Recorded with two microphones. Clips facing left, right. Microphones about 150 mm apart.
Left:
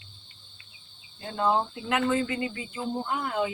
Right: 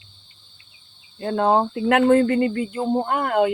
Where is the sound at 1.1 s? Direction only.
60° right (ahead or behind).